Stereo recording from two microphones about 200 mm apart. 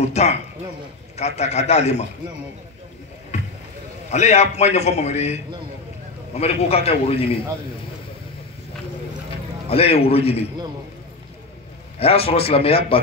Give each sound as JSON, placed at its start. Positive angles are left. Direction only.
{"t": 0.0, "sound": "a man's voice", "side_deg": 35}
{"t": 3.3, "sound": "rowboat", "side_deg": 35}
{"t": 4.1, "sound": "a man's voice", "side_deg": 35}
{"t": 9.7, "sound": "a man's voice", "side_deg": 30}
{"t": 12.0, "sound": "a man's voice", "side_deg": 30}